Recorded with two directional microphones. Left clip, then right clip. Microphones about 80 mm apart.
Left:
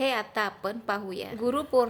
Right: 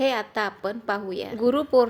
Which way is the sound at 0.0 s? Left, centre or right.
Right.